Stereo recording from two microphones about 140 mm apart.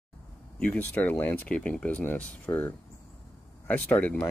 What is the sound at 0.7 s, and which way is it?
Speech, 10° left (ahead or behind).